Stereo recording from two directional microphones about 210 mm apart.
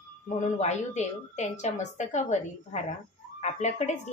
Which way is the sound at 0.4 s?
35° left (ahead or behind).